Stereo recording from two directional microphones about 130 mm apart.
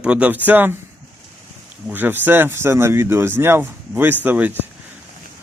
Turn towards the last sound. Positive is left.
turn(degrees=-15)  # may be behind; listen again after turning